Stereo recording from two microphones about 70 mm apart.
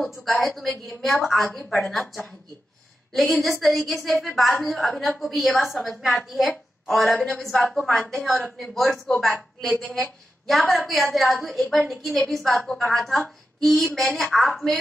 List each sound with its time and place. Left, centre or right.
0.0 s a woman's voice: centre